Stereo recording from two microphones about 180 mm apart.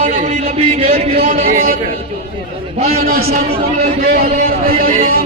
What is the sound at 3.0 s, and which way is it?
Speech, 55° right (ahead or behind).